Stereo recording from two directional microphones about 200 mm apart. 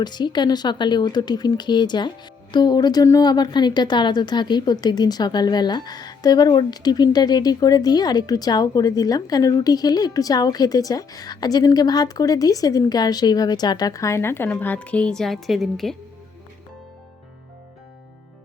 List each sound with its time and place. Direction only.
0.0 s speech: 20° left (ahead or behind); by 16.0 s centre (ahead or behind)